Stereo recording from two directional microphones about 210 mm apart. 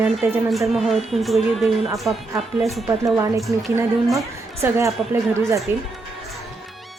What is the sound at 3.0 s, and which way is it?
Speech, 15° right (ahead or behind).